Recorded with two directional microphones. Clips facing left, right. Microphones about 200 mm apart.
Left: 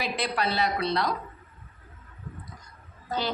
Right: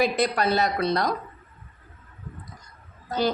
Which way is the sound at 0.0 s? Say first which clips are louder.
Right 6 dB; 45° right (ahead or behind).